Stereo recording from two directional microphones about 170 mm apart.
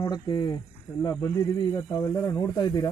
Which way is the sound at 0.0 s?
25° left (ahead or behind).